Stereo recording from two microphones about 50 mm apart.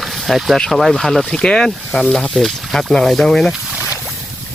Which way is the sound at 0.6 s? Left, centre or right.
Centre.